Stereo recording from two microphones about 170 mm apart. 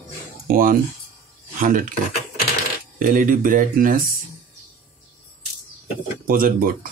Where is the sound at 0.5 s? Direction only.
55° right (ahead or behind).